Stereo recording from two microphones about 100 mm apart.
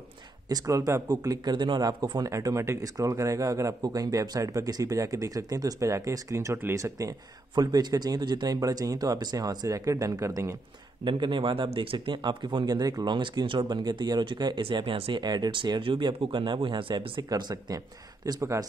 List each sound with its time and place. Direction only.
0.5 s speech: 35° right (ahead or behind)
11.1 s speech: 55° right (ahead or behind)
15.2 s speech: 50° right (ahead or behind)
17.3 s speech: 40° right (ahead or behind)